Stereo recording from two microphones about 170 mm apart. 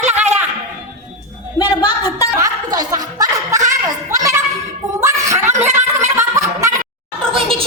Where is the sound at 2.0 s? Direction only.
20° left (ahead or behind).